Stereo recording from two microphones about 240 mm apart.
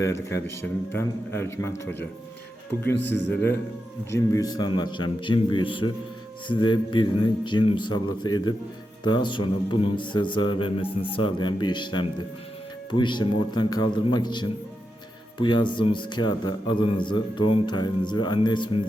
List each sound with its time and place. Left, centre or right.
0.0 s a man's voice: centre